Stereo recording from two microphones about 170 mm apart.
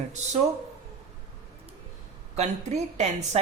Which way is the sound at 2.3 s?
40° right (ahead or behind).